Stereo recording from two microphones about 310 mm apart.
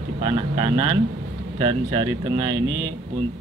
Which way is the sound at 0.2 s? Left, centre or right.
Centre.